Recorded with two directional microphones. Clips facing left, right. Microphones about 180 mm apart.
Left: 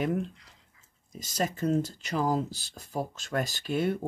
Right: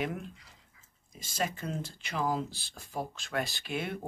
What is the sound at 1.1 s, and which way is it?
Speech, 40° left (ahead or behind).